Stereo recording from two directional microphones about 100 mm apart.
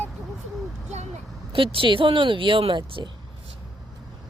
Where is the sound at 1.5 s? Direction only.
60° right (ahead or behind).